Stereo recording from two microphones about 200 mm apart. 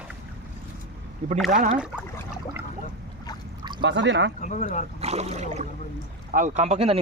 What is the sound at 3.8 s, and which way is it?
Speech, 65° right (ahead or behind).